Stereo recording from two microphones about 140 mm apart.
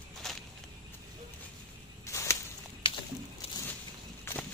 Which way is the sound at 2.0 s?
20° left (ahead or behind).